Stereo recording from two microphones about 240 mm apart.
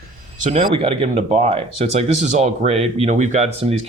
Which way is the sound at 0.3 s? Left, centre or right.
Right.